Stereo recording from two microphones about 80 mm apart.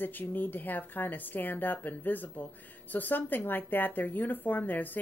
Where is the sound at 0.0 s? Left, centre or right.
Left.